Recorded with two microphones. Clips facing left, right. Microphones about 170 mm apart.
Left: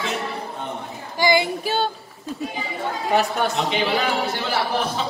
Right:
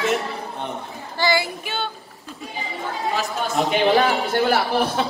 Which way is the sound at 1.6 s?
40° left (ahead or behind).